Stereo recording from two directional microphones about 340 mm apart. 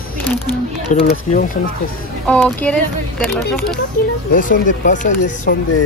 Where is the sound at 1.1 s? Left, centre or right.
Left.